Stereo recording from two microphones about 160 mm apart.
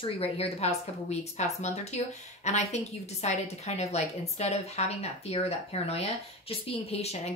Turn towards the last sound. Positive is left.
turn(degrees=40)  # may be behind; listen again after turning